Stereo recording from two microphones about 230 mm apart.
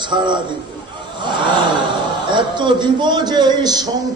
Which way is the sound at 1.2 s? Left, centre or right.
Centre.